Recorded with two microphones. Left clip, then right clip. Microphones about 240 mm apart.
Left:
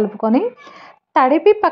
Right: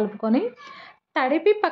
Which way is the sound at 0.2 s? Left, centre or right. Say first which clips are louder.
Left 7 dB; centre.